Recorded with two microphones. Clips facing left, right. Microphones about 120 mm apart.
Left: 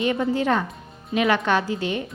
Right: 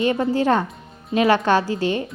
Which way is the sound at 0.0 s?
35° right (ahead or behind).